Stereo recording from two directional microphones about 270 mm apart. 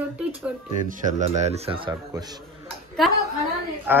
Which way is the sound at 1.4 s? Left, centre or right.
Right.